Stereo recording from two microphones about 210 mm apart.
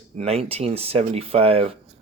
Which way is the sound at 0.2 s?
25° right (ahead or behind).